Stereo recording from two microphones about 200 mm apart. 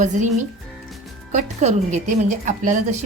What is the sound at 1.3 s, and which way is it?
A woman's voice, 35° right (ahead or behind).